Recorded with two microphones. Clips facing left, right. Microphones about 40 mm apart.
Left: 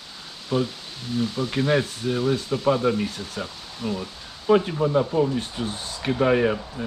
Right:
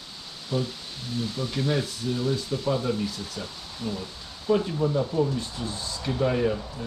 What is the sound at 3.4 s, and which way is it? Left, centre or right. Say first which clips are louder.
Speech: left 4 dB; left.